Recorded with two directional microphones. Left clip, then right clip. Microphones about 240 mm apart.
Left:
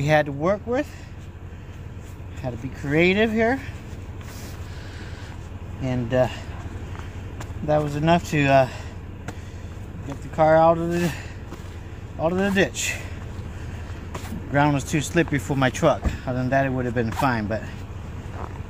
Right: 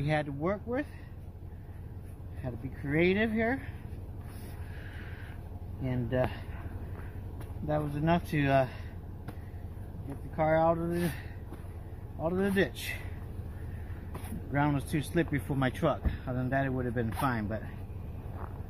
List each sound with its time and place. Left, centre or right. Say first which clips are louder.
0.0 s speech: left 12 dB; left
0.4 s speech: left 10 dB; centre
2.4 s speech: left 9 dB; centre
5.9 s speech: left 10 dB; centre
10.3 s speech: left 11 dB; centre
14.1 s speech: left 11 dB; centre